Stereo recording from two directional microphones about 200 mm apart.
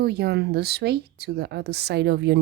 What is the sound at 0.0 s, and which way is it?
A woman's voice, 55° right (ahead or behind).